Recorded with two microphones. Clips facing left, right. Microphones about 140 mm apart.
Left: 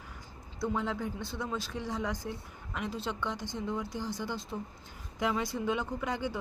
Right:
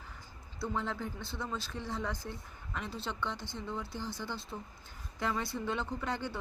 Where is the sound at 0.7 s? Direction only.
10° left (ahead or behind).